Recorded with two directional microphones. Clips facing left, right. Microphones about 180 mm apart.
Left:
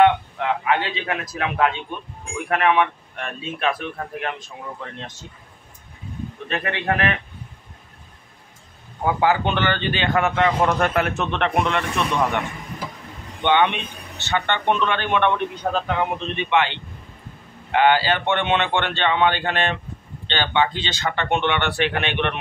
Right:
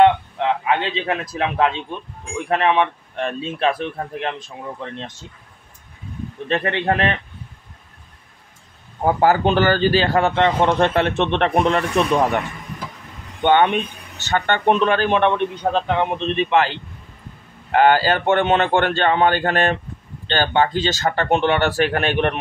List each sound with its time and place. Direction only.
0.0 s a sound: 25° right (ahead or behind)
1.3 s a man's voice: 30° right (ahead or behind)
6.5 s a man's voice: 30° right (ahead or behind)
9.0 s a man's voice: 40° right (ahead or behind)
13.4 s a man's voice: 45° right (ahead or behind)